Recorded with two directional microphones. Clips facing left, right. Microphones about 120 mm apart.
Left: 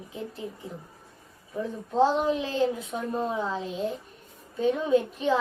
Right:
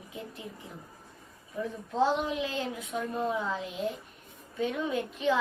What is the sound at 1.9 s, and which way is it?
A child's voice, 35° left (ahead or behind).